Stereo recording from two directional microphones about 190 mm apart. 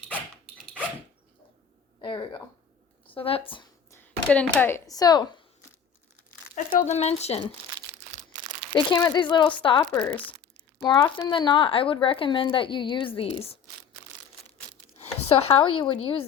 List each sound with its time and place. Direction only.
2.0 s a sound: 25° left (ahead or behind)
3.2 s speech: 30° left (ahead or behind)
3.9 s speech: 10° left (ahead or behind)
6.7 s speech: 35° left (ahead or behind)
8.7 s speech: 20° left (ahead or behind)
15.0 s a sound: 35° left (ahead or behind)
15.8 s speech: 25° left (ahead or behind)